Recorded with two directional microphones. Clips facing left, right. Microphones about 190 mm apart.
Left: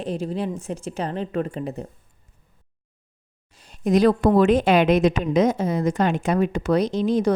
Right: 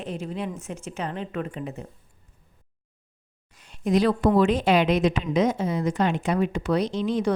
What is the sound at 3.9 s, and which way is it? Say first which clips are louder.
A woman's voice: left 3 dB; 45° left (ahead or behind).